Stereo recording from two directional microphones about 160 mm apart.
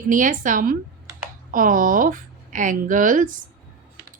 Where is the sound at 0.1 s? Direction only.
55° right (ahead or behind).